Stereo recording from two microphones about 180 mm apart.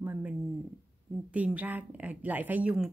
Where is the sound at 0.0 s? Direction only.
10° right (ahead or behind).